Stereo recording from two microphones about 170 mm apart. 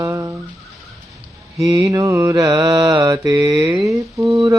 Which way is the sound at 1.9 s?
20° right (ahead or behind).